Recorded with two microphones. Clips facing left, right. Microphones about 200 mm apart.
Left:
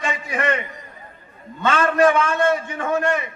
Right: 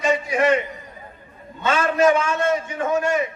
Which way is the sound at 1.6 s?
55° left (ahead or behind).